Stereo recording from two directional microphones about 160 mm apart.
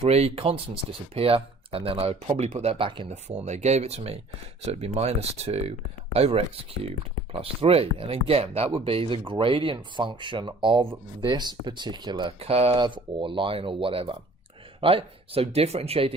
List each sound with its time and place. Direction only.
0.0 s speech: 40° right (ahead or behind)
3.1 s speech: 45° right (ahead or behind); by 12.3 s 25° right (ahead or behind)
12.4 s speech: 40° right (ahead or behind)